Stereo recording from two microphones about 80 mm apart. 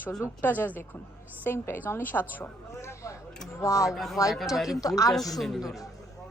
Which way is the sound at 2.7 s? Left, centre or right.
Left.